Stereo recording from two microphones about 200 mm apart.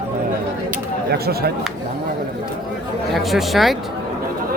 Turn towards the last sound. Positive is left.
turn(degrees=0)  # may be behind; listen again after turning